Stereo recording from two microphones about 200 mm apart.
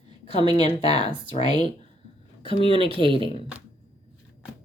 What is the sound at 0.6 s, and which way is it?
Speech, 30° left (ahead or behind).